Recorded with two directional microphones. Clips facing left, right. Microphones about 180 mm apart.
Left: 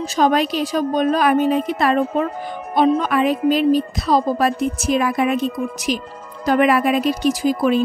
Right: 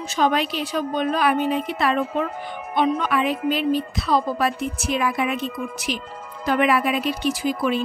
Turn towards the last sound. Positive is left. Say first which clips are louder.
# left 5 dB
turn(degrees=40)  # may be behind; listen again after turning